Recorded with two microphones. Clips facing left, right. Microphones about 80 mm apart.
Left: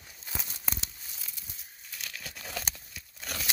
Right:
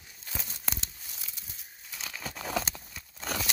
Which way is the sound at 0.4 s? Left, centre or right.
Centre.